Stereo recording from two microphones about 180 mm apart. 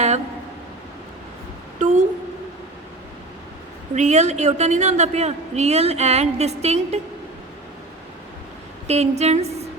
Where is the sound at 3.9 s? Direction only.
40° right (ahead or behind).